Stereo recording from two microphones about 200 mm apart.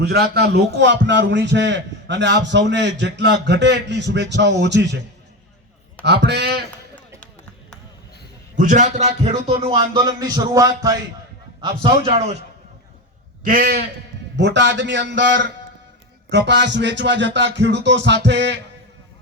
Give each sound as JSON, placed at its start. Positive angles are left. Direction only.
{"t": 0.0, "sound": "a man's voice", "side_deg": -55}
{"t": 6.1, "sound": "a man's voice", "side_deg": -55}
{"t": 8.5, "sound": "a man's voice", "side_deg": -40}
{"t": 11.6, "sound": "a man's voice", "side_deg": -30}
{"t": 13.4, "sound": "a man's voice", "side_deg": -45}
{"t": 14.3, "sound": "a man's voice", "side_deg": -60}